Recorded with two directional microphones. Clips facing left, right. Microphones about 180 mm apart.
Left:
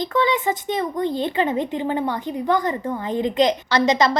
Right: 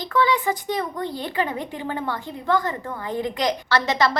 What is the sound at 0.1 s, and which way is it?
Speech, 20° left (ahead or behind).